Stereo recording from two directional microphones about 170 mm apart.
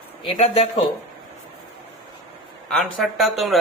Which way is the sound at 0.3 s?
35° left (ahead or behind).